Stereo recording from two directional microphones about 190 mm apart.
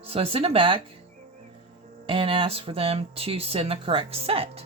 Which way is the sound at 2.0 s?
25° right (ahead or behind).